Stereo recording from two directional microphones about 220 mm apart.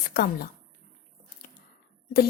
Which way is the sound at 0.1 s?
45° left (ahead or behind).